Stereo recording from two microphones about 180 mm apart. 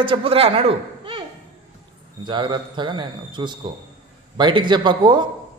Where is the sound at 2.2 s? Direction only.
25° right (ahead or behind).